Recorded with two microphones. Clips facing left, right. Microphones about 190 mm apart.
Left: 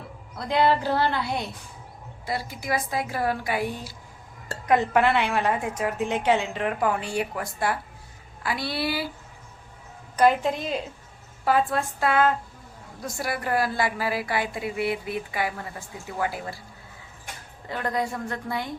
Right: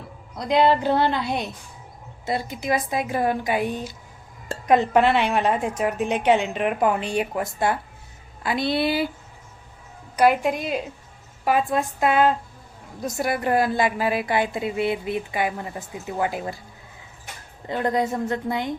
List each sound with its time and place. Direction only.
0.3 s a woman's voice: 15° right (ahead or behind)
10.2 s a woman's voice: 15° right (ahead or behind)
17.7 s a woman's voice: 20° right (ahead or behind)